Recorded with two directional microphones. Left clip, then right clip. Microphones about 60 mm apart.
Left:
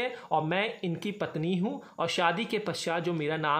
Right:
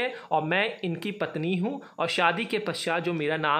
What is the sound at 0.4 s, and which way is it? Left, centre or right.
Speech, centre.